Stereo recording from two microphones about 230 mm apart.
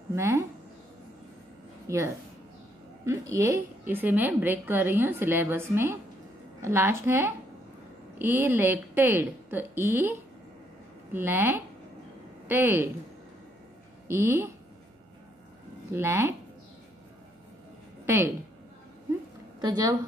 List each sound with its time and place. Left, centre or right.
0.1 s a woman's voice: centre
1.9 s a woman's voice: centre
14.0 s a woman's voice: centre
15.9 s a woman's voice: centre
18.0 s a woman's voice: centre
19.6 s a woman's voice: centre